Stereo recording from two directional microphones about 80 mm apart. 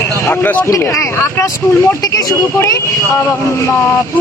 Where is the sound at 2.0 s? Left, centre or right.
Left.